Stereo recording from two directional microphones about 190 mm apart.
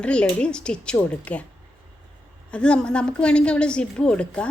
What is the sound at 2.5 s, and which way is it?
A woman's voice, 5° left (ahead or behind).